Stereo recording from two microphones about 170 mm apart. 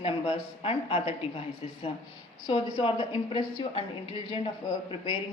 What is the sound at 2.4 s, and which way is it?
A woman's voice, 30° left (ahead or behind).